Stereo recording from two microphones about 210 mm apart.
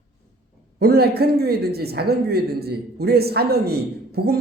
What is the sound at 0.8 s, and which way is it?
A man's voice, 50° right (ahead or behind).